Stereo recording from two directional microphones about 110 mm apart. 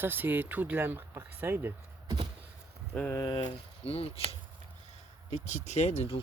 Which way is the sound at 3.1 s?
45° left (ahead or behind).